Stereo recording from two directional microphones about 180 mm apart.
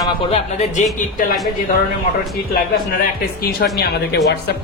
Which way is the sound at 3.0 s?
55° left (ahead or behind).